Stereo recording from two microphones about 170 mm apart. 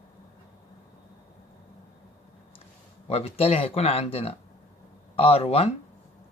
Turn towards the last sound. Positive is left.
turn(degrees=35)  # may be behind; listen again after turning